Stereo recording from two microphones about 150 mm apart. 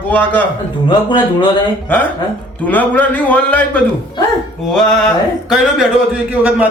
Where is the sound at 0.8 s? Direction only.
30° left (ahead or behind).